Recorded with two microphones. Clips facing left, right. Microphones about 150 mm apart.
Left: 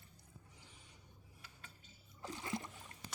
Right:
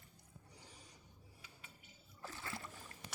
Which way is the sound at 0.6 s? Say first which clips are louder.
Right 3 dB; 40° right (ahead or behind).